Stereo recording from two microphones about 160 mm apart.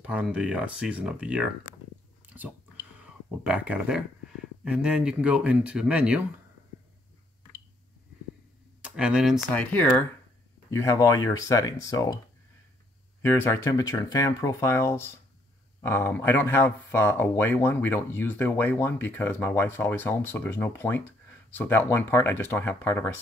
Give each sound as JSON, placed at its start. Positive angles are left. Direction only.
{"t": 0.0, "sound": "speech", "side_deg": -5}
{"t": 3.0, "sound": "speech", "side_deg": -5}
{"t": 8.8, "sound": "speech", "side_deg": -5}
{"t": 9.6, "sound": "speech", "side_deg": 10}
{"t": 13.2, "sound": "speech", "side_deg": 15}